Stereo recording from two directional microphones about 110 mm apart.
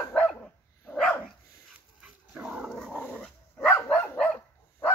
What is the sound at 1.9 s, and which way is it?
Dog, 5° right (ahead or behind).